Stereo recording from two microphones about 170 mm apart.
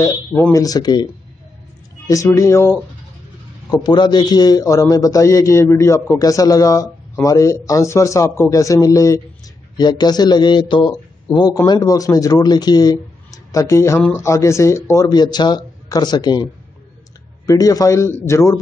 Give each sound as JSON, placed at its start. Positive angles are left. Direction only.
{"t": 0.0, "sound": "a man's voice", "side_deg": 15}
{"t": 2.0, "sound": "a man's voice", "side_deg": 20}
{"t": 17.5, "sound": "a man's voice", "side_deg": 20}